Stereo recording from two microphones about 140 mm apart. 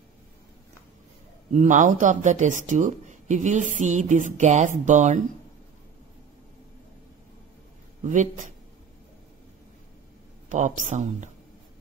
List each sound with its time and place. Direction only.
1.5 s speech: 60° right (ahead or behind)
8.0 s speech: 65° right (ahead or behind)
10.5 s speech: 60° right (ahead or behind)